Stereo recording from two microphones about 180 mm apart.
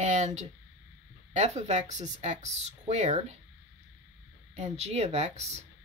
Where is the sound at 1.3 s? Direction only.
40° right (ahead or behind).